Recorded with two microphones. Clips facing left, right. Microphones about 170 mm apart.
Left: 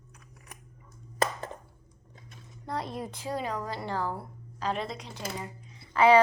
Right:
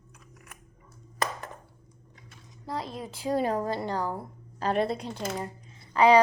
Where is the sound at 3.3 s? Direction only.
50° right (ahead or behind).